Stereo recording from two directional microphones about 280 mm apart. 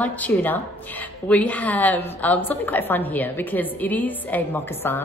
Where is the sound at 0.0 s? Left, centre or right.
Centre.